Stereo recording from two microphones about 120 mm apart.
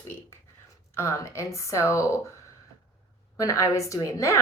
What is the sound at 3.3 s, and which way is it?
Speech, 25° left (ahead or behind).